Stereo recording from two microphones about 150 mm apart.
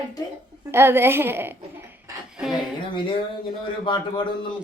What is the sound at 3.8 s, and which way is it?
Speech, 35° left (ahead or behind).